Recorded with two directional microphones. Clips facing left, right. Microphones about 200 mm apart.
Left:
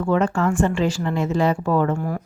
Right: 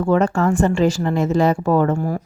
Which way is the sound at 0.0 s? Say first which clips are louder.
Right 3 dB; 40° right (ahead or behind).